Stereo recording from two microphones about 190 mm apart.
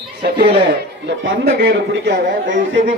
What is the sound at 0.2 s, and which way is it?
A man's voice, 55° right (ahead or behind).